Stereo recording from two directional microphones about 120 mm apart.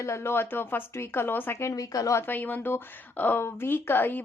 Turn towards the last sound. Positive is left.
turn(degrees=15)  # may be behind; listen again after turning